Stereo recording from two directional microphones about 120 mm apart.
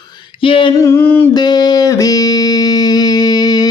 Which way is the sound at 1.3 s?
35° left (ahead or behind).